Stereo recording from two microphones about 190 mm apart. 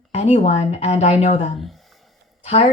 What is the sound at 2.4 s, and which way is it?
Speech, 30° left (ahead or behind).